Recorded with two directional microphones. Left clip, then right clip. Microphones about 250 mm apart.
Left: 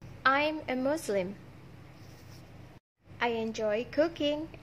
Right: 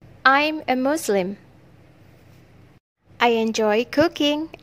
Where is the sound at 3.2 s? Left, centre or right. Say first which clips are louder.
Right 12 dB; right.